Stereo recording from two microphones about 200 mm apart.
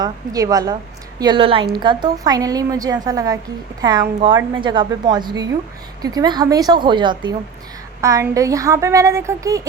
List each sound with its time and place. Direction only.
0.0 s a woman's voice: 15° right (ahead or behind)